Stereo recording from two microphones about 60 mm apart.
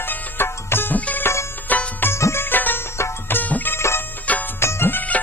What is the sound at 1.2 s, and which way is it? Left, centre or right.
Music, left.